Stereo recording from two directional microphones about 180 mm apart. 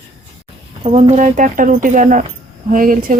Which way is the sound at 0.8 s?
35° right (ahead or behind).